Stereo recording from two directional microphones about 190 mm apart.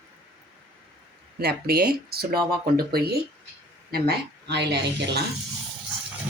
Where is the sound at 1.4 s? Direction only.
55° right (ahead or behind).